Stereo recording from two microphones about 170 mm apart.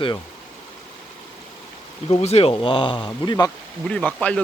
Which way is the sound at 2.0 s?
35° left (ahead or behind).